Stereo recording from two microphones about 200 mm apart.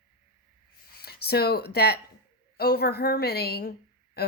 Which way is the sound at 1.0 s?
50° left (ahead or behind).